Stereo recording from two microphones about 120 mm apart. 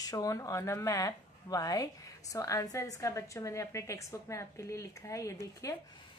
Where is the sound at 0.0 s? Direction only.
30° left (ahead or behind).